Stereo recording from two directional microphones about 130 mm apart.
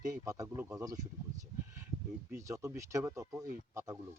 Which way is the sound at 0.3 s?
25° right (ahead or behind).